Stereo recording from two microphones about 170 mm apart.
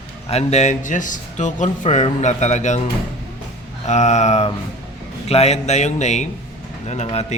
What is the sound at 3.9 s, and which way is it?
A man's voice, 45° left (ahead or behind).